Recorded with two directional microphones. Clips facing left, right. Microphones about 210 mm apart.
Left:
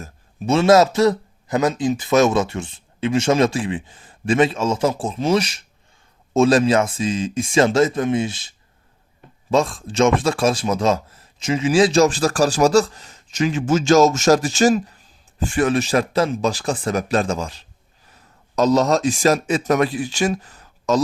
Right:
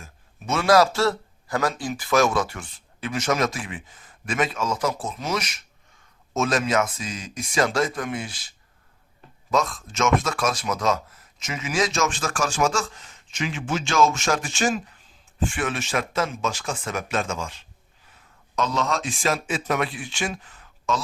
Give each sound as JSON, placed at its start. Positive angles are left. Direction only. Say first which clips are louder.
{"t": 0.0, "sound": "speech", "louder": "left 10 dB", "side_deg": 30}